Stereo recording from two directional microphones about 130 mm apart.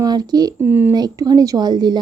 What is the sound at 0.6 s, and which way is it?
Speech, 15° right (ahead or behind).